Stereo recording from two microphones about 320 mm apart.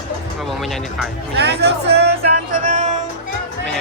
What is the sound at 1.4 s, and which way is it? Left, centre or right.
Speech, right.